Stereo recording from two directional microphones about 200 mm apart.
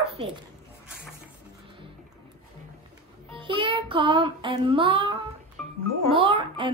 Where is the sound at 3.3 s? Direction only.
25° right (ahead or behind).